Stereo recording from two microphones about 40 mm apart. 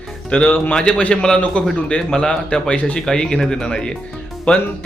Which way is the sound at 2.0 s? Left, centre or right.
Centre.